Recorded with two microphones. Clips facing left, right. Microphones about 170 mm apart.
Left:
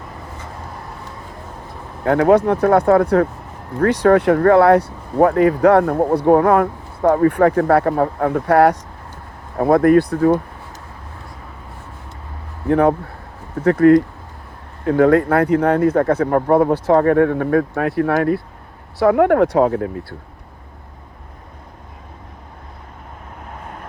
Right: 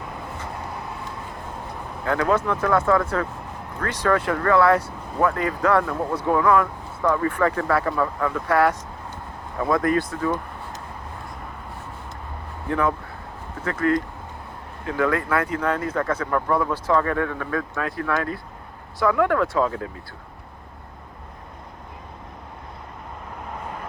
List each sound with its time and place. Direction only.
2.0 s speech: 55° left (ahead or behind)
13.7 s speech: 60° left (ahead or behind)
17.0 s speech: 50° left (ahead or behind)